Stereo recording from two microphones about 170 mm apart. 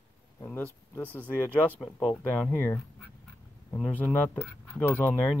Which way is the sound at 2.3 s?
10° left (ahead or behind).